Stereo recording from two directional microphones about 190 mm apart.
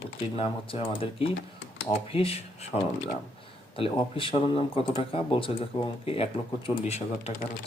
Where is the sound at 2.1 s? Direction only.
30° left (ahead or behind).